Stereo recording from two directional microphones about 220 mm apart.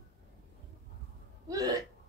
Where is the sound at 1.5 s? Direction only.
15° right (ahead or behind).